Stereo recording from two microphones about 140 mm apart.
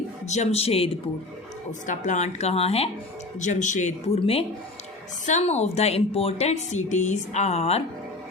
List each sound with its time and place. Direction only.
0.3 s a woman's voice: 50° left (ahead or behind)
1.9 s a woman's voice: 60° left (ahead or behind)
3.4 s speech: 60° left (ahead or behind); by 4.4 s 45° left (ahead or behind)
5.2 s a woman's voice: 55° left (ahead or behind)